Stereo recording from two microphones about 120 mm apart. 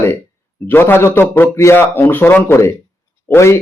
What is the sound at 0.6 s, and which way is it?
Speech, 15° left (ahead or behind).